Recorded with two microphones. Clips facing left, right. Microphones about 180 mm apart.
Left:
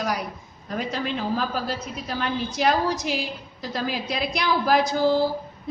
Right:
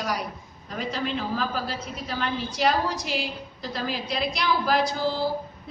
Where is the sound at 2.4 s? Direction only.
50° left (ahead or behind).